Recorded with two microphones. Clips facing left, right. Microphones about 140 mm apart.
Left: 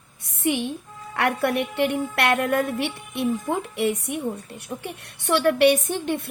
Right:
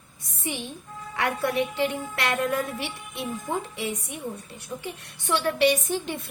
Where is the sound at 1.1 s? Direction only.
60° left (ahead or behind).